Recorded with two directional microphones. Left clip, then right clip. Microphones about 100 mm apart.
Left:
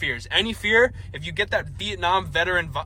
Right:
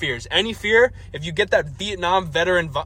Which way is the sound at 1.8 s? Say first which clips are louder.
Right 2 dB; 40° right (ahead or behind).